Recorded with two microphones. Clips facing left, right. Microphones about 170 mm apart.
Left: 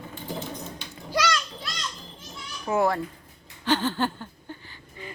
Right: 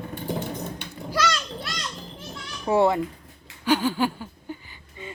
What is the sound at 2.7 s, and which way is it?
Speech, 30° right (ahead or behind).